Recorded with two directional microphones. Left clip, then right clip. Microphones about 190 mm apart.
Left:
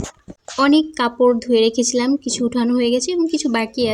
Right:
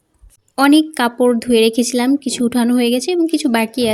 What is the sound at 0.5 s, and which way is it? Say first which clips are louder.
Speech: right 3 dB; 30° right (ahead or behind).